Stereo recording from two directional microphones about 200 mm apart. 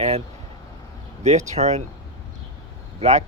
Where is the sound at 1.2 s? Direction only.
35° right (ahead or behind).